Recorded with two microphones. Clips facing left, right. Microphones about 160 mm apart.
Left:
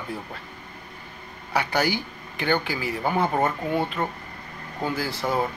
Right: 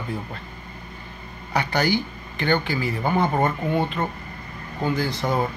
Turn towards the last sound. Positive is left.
turn(degrees=5)  # may be behind; listen again after turning